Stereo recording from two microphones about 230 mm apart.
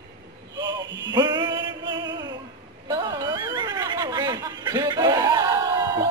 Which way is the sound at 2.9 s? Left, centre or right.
Centre.